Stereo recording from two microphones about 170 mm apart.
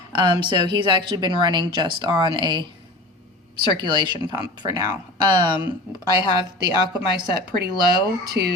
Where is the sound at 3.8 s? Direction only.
25° right (ahead or behind).